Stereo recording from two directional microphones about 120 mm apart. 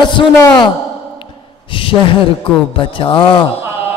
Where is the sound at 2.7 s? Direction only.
45° left (ahead or behind).